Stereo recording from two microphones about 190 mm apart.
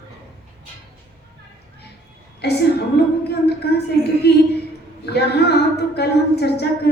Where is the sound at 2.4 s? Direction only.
60° left (ahead or behind).